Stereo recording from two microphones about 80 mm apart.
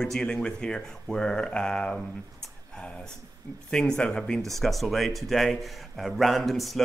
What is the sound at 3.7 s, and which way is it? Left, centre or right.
Speech, centre.